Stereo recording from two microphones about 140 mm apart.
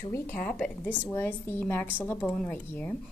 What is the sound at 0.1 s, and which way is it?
A woman's voice, 10° left (ahead or behind).